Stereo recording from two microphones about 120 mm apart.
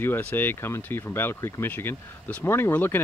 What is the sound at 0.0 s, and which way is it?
Speech, 15° left (ahead or behind).